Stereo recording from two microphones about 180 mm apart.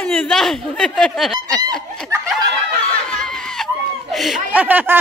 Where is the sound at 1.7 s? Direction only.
5° left (ahead or behind).